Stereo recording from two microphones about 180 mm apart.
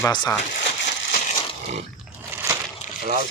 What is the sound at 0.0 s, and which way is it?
Speech, 20° left (ahead or behind).